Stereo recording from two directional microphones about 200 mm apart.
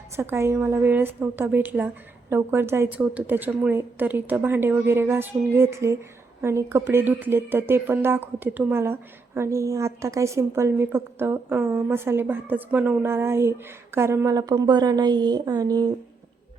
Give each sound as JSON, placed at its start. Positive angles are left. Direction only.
{"t": 0.2, "sound": "a woman's voice", "side_deg": -10}